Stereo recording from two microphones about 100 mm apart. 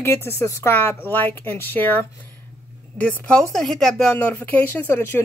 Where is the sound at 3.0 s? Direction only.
10° left (ahead or behind).